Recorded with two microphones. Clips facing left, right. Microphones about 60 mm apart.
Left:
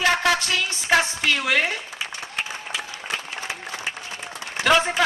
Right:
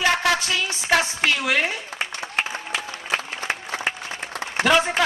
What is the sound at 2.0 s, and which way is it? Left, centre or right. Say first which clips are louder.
Applause: right 4 dB; right.